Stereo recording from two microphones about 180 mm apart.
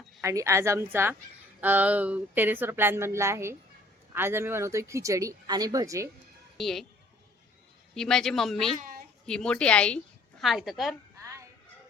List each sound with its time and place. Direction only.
0.2 s speech: 15° right (ahead or behind)
6.6 s speech: centre (ahead or behind)
7.9 s speech: 5° left (ahead or behind)
8.8 s a sound: 55° right (ahead or behind)
9.2 s a woman's voice: 5° left (ahead or behind)
11.2 s music: 15° right (ahead or behind)